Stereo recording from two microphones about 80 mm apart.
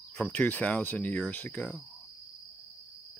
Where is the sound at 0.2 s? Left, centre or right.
Left.